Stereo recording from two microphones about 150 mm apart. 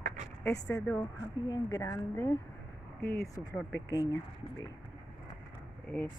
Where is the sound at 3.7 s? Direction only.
20° left (ahead or behind).